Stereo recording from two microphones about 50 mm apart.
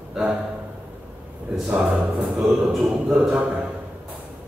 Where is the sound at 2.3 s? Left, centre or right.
Centre.